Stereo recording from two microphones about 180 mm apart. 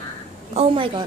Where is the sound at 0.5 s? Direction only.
30° right (ahead or behind).